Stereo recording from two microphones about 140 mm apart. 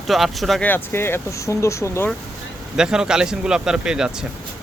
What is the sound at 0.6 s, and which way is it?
Speech, 15° left (ahead or behind).